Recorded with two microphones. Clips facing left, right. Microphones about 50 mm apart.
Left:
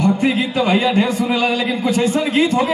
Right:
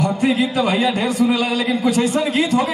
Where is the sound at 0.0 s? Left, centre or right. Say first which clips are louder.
Left 1 dB; left.